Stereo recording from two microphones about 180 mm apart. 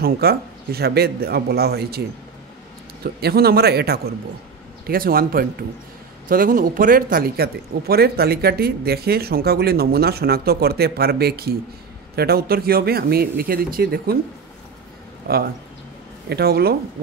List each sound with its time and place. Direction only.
0.0 s speech: 60° right (ahead or behind)
15.2 s speech: 60° right (ahead or behind)